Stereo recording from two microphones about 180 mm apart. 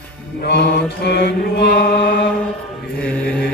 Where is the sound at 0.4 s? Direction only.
65° left (ahead or behind).